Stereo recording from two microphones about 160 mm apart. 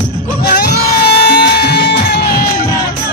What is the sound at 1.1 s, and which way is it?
Music, 90° left.